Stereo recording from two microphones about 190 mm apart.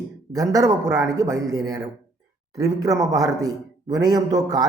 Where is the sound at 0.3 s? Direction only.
15° right (ahead or behind).